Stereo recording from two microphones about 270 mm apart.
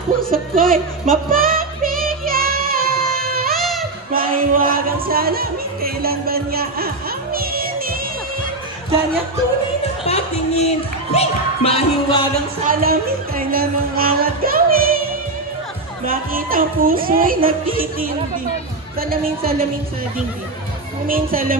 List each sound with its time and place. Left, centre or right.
0.2 s music: right
1.3 s child singing: right
3.3 s music: right
3.5 s music: centre
4.1 s music: right
10.0 s speech: left
12.6 s music: right
16.1 s music: right
21.1 s music: right